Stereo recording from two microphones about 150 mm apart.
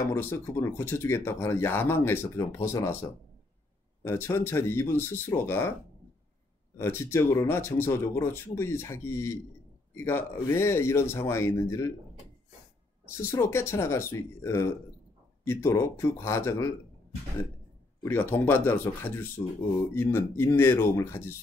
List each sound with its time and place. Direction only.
0.0 s speech: 15° left (ahead or behind)
6.8 s speech: 15° left (ahead or behind)
13.2 s speech: 20° left (ahead or behind)
18.0 s speech: 15° left (ahead or behind)